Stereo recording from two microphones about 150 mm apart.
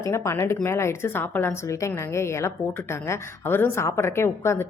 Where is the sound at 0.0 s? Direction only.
20° left (ahead or behind).